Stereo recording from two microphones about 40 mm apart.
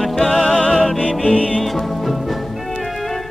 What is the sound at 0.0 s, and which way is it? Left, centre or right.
Music, centre.